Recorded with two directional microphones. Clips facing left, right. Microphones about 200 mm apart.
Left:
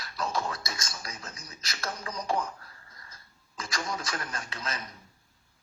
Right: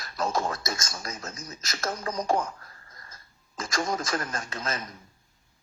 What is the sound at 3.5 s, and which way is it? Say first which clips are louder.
Speech: right 6 dB; 45° right (ahead or behind).